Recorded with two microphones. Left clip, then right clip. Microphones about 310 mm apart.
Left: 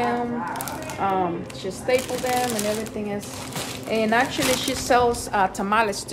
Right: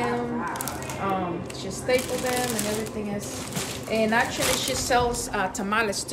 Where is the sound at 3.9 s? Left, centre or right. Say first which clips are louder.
Left 2 dB; left.